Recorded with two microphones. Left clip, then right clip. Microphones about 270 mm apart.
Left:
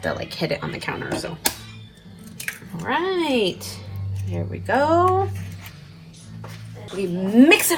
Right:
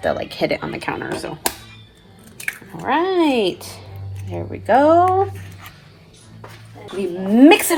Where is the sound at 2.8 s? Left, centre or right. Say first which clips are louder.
Right 5 dB; right.